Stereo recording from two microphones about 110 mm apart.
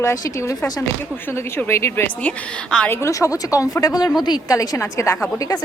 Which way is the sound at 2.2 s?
5° left (ahead or behind).